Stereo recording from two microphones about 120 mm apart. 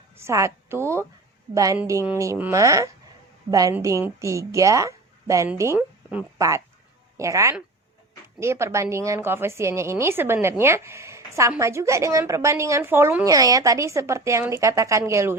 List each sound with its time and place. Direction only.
0.2 s a woman's voice: 25° right (ahead or behind)